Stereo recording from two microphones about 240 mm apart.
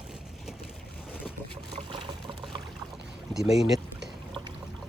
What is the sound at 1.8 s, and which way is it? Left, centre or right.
Pour, centre.